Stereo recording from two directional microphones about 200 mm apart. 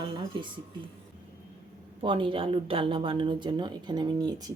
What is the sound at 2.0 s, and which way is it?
A woman's voice, 25° right (ahead or behind).